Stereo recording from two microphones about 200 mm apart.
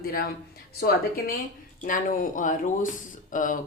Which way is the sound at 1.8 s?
40° left (ahead or behind).